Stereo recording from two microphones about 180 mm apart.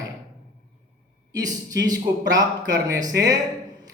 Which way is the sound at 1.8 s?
20° right (ahead or behind).